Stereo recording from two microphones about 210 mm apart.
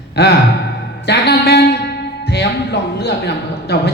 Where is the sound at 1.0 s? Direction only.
50° left (ahead or behind).